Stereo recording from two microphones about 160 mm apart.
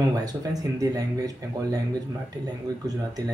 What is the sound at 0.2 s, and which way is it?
Speech, 25° right (ahead or behind).